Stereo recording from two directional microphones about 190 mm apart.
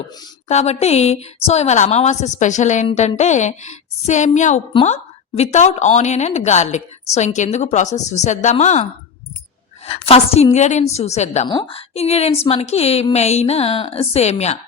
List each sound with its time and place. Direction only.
0.4 s a woman's voice: 35° left (ahead or behind)